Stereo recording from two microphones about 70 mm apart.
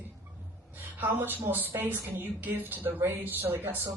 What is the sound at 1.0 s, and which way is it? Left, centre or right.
Speech, right.